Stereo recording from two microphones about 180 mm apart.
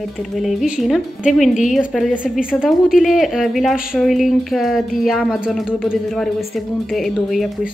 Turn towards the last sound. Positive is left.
turn(degrees=0)  # may be behind; listen again after turning